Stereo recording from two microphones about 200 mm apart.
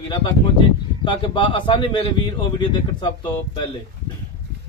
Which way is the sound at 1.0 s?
25° left (ahead or behind).